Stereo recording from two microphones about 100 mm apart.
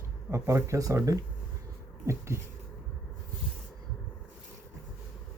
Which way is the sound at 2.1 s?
30° right (ahead or behind).